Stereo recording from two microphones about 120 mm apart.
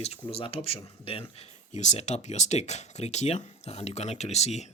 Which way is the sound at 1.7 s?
75° left (ahead or behind).